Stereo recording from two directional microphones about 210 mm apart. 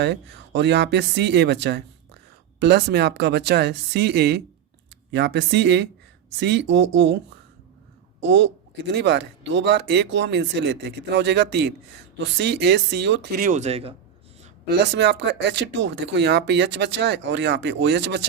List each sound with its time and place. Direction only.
0.0 s speech: 55° right (ahead or behind)
8.2 s speech: 55° right (ahead or behind)
13.4 s speech: 35° right (ahead or behind)
14.7 s speech: 55° right (ahead or behind)